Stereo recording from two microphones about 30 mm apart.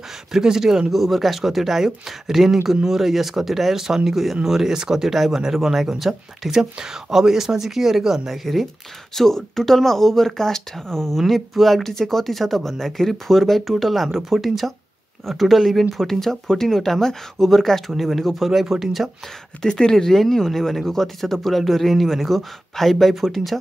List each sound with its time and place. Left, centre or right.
0.3 s speech: centre
0.9 s speech: centre
6.5 s speech: centre
9.1 s speech: centre
11.1 s speech: centre
15.9 s speech: centre
18.5 s speech: centre
19.6 s speech: left; by 23.6 s centre